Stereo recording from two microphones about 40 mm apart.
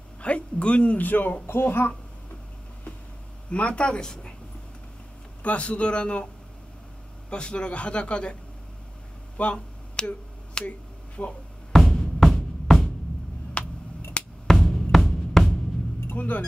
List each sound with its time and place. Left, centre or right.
0.2 s a man's voice: left
0.9 s a man's voice: left
1.5 s speech: left
3.4 s a man's voice: left
5.4 s a man's voice: left
7.2 s a man's voice: left
9.4 s a sound: left
11.2 s a man's voice: left
11.7 s music: centre
13.6 s a sound: left
14.2 s drum: left
14.5 s drum: centre
16.2 s a man's voice: left